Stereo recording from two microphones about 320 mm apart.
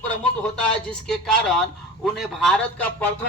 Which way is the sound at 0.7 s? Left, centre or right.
Centre.